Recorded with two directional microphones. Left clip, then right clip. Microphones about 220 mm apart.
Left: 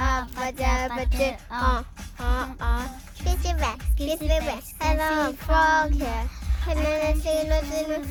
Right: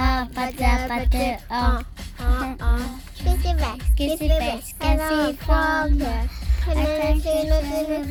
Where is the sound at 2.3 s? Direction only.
5° left (ahead or behind).